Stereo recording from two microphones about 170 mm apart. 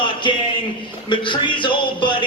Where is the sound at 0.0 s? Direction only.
30° left (ahead or behind).